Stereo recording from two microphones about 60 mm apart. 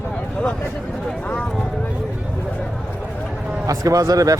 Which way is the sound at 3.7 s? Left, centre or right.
Right.